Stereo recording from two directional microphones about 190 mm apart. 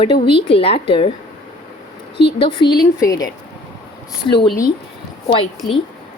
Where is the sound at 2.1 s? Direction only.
30° left (ahead or behind).